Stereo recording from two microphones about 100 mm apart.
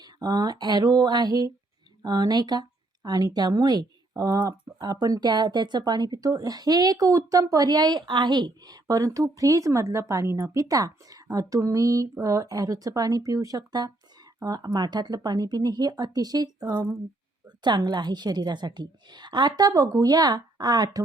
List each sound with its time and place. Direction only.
0.0 s a woman's voice: 40° right (ahead or behind)